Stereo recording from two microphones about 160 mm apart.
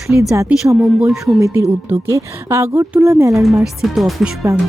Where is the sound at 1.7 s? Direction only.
15° right (ahead or behind).